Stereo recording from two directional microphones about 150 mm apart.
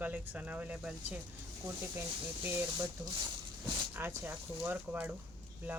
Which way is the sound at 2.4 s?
15° right (ahead or behind).